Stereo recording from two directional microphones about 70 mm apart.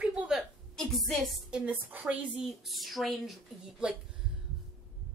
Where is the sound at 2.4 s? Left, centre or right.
Centre.